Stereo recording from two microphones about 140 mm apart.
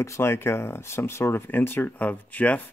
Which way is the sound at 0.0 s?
20° left (ahead or behind).